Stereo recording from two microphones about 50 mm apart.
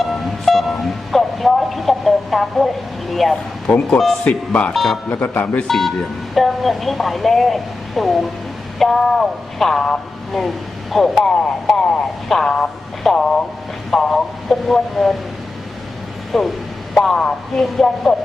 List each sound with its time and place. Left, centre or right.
0.0 s a sound: centre
3.1 s speech: centre
4.2 s speech: left
4.7 s speech: centre
5.0 s speech: left
5.6 s speech: centre
16.3 s speech: centre